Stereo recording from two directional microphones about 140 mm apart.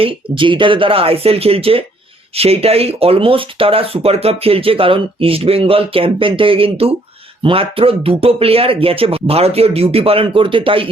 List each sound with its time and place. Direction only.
0.0 s speech: 35° right (ahead or behind)